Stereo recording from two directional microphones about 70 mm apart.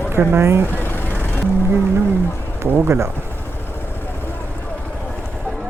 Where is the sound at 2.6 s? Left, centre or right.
Right.